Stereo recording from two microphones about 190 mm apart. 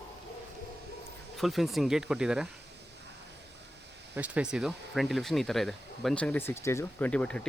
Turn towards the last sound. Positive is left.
turn(degrees=5)  # may be behind; listen again after turning